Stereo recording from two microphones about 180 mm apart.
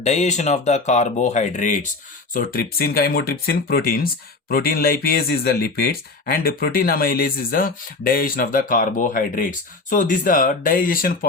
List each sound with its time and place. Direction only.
0.0 s speech: 40° left (ahead or behind)